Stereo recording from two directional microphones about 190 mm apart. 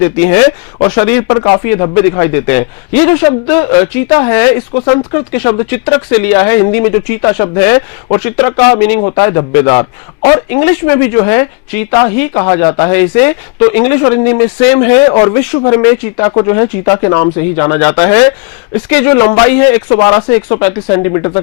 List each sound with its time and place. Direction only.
0.0 s speech: 15° left (ahead or behind)
15.1 s speech: 30° left (ahead or behind)